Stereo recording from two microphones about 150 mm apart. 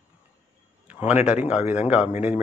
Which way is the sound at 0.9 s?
10° right (ahead or behind).